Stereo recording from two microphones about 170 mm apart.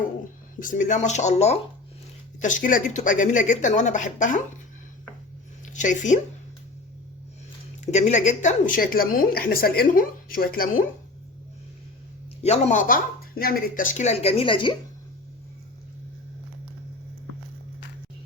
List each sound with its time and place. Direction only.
0.6 s speech: 50° left (ahead or behind)
5.7 s speech: 45° left (ahead or behind)
7.9 s a woman's voice: 40° left (ahead or behind); by 10.8 s 60° left (ahead or behind)
12.4 s speech: 40° left (ahead or behind)